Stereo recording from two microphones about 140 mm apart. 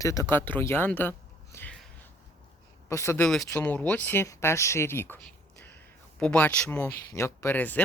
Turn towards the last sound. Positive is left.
turn(degrees=10)  # may be behind; listen again after turning